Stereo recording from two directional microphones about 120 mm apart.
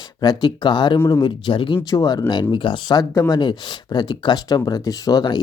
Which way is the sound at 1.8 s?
30° left (ahead or behind).